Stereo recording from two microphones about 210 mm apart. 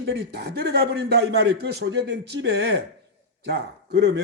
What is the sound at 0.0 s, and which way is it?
A man's voice, 50° right (ahead or behind).